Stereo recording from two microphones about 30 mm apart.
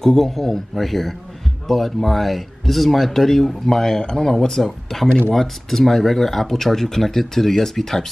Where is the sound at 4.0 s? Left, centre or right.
Left.